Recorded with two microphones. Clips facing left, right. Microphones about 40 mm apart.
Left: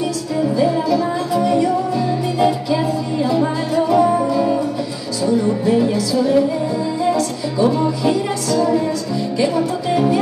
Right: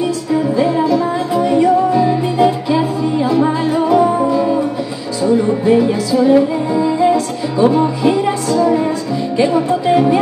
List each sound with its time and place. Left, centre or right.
0.0 s music: right